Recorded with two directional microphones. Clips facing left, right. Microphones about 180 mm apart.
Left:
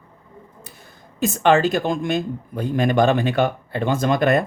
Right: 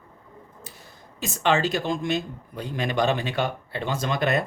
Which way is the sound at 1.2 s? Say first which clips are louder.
Left 6 dB; 55° left (ahead or behind).